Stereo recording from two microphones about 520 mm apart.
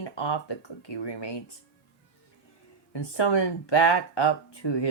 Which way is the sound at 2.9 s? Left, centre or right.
Left.